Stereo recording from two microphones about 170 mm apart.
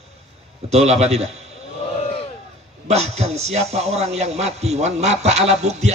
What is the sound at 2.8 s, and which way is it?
A man's voice, 40° right (ahead or behind).